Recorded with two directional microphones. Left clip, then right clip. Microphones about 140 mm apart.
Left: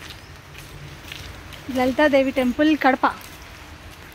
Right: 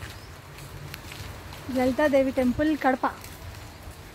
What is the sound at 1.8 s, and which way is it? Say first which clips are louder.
Speech: left 4 dB; 30° left (ahead or behind).